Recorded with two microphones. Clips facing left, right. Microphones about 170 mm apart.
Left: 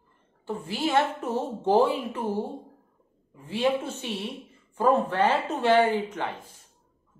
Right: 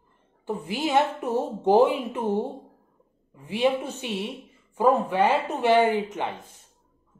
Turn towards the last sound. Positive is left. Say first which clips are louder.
# right 2 dB
turn(degrees=-20)  # may be behind; listen again after turning